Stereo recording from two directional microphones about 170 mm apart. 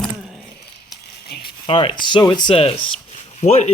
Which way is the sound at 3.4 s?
40° left (ahead or behind).